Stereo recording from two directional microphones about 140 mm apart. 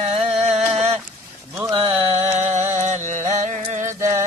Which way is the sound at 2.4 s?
55° right (ahead or behind).